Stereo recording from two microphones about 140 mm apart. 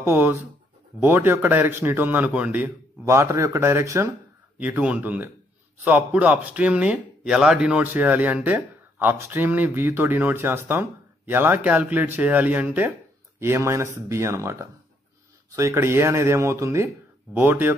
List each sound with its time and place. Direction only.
0.0 s speech: 15° right (ahead or behind)
4.6 s speech: 10° right (ahead or behind)